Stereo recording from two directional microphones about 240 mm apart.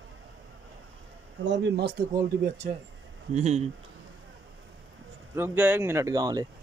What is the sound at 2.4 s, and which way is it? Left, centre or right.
Speech, right.